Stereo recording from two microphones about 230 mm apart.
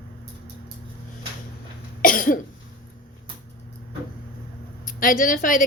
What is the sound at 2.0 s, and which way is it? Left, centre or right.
Cough, left.